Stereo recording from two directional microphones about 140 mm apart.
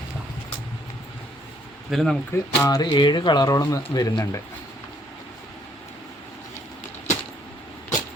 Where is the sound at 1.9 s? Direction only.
Centre (ahead or behind).